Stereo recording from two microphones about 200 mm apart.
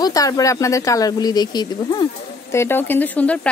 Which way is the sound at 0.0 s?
15° left (ahead or behind).